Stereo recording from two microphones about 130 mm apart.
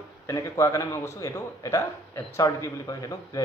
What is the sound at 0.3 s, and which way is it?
Speech, 25° left (ahead or behind).